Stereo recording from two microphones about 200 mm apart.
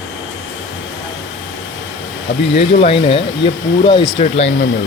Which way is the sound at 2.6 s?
30° left (ahead or behind).